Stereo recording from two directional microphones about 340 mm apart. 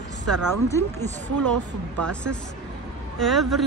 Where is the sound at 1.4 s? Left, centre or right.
Right.